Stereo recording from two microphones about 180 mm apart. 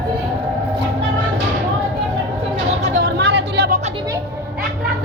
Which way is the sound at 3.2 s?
75° right (ahead or behind).